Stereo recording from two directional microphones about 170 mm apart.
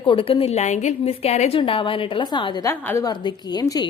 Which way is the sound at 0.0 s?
30° left (ahead or behind).